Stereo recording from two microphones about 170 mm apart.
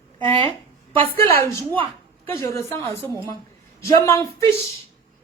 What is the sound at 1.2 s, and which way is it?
A woman's voice, 15° left (ahead or behind).